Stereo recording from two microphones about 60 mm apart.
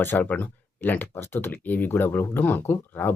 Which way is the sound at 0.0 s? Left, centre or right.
Left.